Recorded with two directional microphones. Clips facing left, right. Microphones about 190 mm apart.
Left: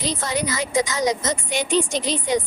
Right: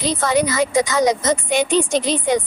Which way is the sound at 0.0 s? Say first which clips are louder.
Right 7 dB; 55° right (ahead or behind).